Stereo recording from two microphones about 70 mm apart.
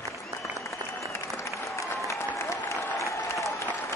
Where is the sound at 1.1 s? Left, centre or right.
Left.